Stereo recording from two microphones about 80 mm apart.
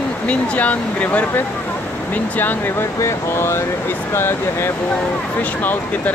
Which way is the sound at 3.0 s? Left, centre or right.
Left.